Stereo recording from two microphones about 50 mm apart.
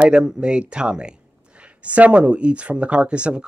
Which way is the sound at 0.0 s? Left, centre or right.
Centre.